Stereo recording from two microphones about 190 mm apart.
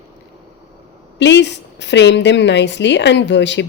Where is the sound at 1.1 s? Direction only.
70° left (ahead or behind).